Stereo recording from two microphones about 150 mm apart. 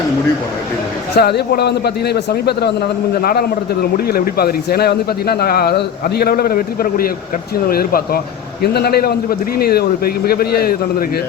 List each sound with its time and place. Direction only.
1.1 s speech: 90° left; by 7.1 s 75° left (ahead or behind)
7.7 s speech: 90° left